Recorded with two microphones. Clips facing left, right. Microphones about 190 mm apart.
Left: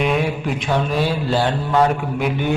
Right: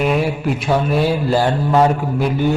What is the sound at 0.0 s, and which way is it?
Mantra, 5° right (ahead or behind).